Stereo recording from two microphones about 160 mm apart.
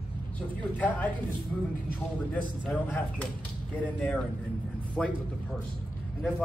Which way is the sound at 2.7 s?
10° left (ahead or behind).